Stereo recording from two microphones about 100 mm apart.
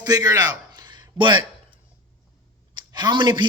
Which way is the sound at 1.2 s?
55° right (ahead or behind).